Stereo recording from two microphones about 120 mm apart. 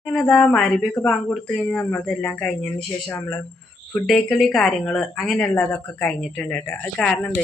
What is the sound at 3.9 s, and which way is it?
Speech, centre (ahead or behind).